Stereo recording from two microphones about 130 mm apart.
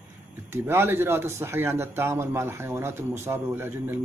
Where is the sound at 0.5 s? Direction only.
20° right (ahead or behind).